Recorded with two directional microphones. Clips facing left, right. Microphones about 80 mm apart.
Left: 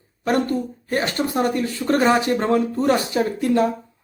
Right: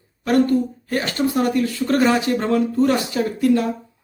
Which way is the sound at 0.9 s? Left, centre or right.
Left.